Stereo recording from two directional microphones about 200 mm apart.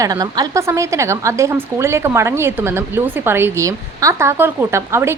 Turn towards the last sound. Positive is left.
turn(degrees=-15)  # may be behind; listen again after turning